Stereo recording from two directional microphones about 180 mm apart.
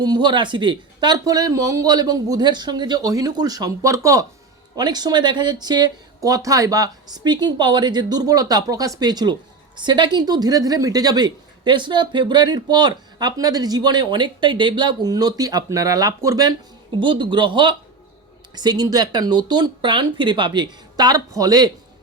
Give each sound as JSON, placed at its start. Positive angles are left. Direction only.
{"t": 0.0, "sound": "a woman's voice", "side_deg": -25}